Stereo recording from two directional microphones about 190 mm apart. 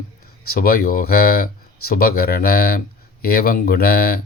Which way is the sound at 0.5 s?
50° left (ahead or behind).